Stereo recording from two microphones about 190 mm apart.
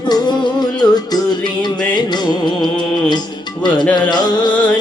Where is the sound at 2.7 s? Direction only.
5° left (ahead or behind).